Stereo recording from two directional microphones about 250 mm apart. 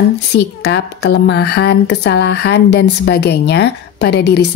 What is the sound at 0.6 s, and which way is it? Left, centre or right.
Speech, left.